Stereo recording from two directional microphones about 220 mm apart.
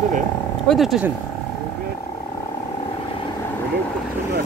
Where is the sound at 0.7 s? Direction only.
Centre (ahead or behind).